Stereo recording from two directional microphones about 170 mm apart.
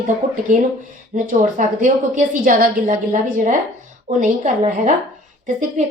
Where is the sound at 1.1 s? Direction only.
50° right (ahead or behind).